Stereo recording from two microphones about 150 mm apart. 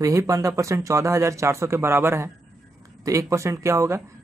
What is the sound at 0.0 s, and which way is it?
Speech, 20° right (ahead or behind).